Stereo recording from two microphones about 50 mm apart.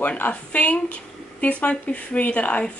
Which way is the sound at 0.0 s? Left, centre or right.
Left.